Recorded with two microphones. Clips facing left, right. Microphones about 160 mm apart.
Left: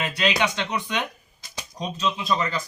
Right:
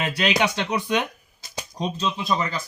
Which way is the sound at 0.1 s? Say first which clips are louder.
Right 2 dB; 5° right (ahead or behind).